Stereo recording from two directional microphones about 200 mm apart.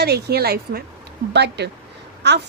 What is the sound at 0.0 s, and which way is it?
A woman's voice, 55° right (ahead or behind).